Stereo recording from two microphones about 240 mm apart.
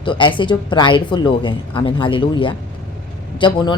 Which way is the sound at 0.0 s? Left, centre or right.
Centre.